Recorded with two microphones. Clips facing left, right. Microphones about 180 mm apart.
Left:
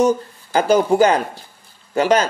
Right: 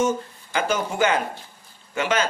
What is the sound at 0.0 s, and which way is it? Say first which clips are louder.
A man's voice: left 6 dB; 35° left (ahead or behind).